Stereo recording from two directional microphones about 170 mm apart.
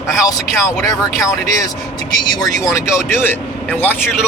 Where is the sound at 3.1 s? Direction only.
15° left (ahead or behind).